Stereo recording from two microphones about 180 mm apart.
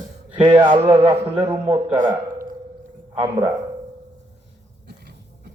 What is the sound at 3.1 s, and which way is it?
Speech, 25° right (ahead or behind).